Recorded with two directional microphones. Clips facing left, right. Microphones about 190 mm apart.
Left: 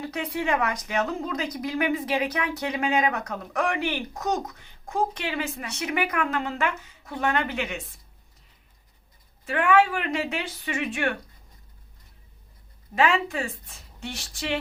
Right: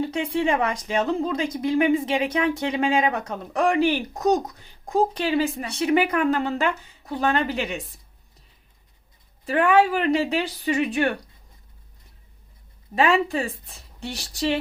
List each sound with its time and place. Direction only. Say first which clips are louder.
0.0 s speech: right 6 dB; 25° right (ahead or behind)
9.5 s speech: right 3 dB; 35° right (ahead or behind)
13.0 s speech: right 3 dB; 35° right (ahead or behind)